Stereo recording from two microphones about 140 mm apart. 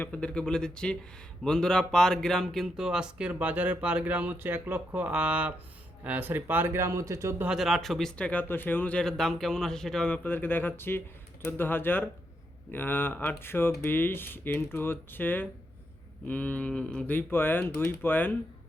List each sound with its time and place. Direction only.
0.0 s a man's voice: 10° left (ahead or behind); by 7.4 s 20° right (ahead or behind)
7.4 s speech: centre (ahead or behind); by 18.3 s 15° left (ahead or behind)